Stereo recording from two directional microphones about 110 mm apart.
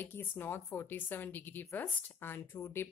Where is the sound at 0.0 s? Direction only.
20° left (ahead or behind).